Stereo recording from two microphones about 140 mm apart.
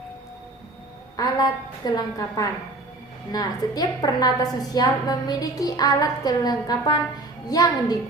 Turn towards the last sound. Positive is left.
turn(degrees=25)  # may be behind; listen again after turning